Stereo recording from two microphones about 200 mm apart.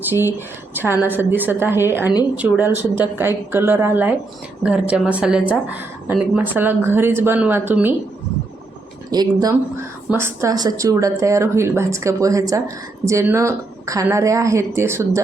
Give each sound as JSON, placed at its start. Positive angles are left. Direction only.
{"t": 0.1, "sound": "speech", "side_deg": -10}
{"t": 9.0, "sound": "speech", "side_deg": -20}